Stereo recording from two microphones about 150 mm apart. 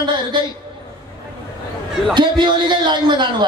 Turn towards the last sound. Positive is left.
turn(degrees=-30)  # may be behind; listen again after turning